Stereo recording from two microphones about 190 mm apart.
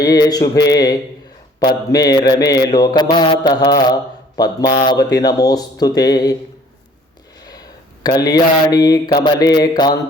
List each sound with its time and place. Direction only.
0.0 s mantra: 20° left (ahead or behind)
8.0 s mantra: 20° left (ahead or behind)